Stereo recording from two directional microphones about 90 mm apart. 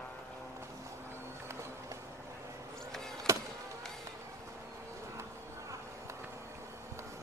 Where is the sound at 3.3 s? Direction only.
35° right (ahead or behind).